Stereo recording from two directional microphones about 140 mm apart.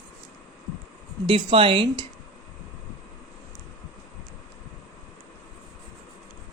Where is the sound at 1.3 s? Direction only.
40° right (ahead or behind).